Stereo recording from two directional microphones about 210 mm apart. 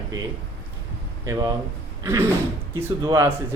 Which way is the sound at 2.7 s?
15° right (ahead or behind).